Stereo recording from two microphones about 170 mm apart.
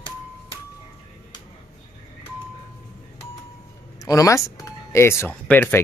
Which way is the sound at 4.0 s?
20° left (ahead or behind).